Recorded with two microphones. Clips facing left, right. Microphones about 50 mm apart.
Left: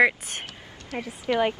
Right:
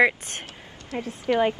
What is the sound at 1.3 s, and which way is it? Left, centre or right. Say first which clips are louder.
Speech: right 2 dB; centre.